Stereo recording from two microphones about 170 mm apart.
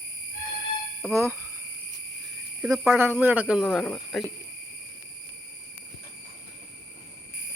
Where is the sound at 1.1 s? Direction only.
15° right (ahead or behind).